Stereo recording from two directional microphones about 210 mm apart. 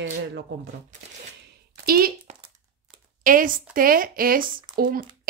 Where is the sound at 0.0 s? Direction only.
55° right (ahead or behind).